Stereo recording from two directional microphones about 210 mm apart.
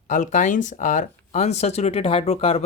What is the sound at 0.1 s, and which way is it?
Speech, 35° left (ahead or behind).